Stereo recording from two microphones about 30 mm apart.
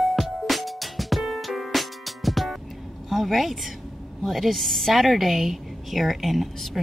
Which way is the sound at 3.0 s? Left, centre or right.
Centre.